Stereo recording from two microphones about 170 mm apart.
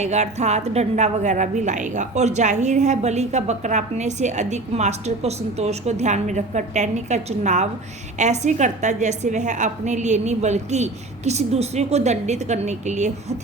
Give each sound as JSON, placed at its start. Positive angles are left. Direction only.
{"t": 0.0, "sound": "a woman's voice", "side_deg": -40}